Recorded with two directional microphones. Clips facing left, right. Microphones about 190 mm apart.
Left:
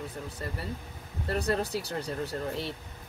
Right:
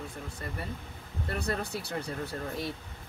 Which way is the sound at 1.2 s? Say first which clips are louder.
Left 4 dB; 30° left (ahead or behind).